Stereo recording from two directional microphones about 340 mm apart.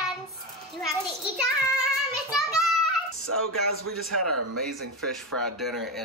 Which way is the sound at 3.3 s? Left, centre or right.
Right.